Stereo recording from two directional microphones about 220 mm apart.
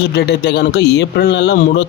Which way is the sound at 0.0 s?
50° left (ahead or behind).